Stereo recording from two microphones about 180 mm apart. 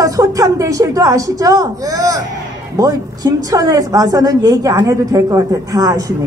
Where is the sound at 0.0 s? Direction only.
20° right (ahead or behind).